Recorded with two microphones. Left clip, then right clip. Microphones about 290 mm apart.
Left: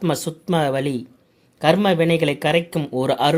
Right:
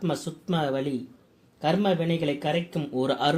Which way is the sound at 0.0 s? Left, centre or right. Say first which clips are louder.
Left 7 dB; left.